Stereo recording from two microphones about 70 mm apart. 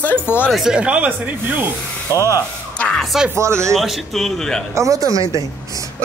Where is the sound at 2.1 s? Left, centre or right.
Left.